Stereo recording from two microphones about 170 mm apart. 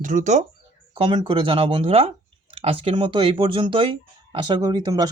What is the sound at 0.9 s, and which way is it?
Speech, 30° right (ahead or behind).